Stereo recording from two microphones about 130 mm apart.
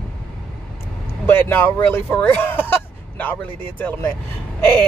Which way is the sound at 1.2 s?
15° left (ahead or behind).